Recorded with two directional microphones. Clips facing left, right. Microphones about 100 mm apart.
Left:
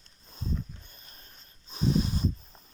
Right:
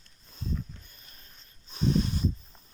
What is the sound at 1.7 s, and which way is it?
Dog, 20° left (ahead or behind).